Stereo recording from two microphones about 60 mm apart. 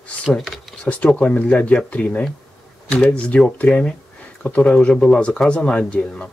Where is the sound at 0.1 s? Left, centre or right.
Left.